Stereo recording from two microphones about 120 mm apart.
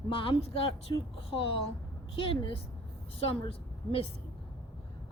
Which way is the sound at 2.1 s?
45° left (ahead or behind).